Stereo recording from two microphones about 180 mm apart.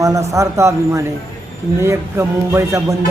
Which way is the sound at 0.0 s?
15° right (ahead or behind).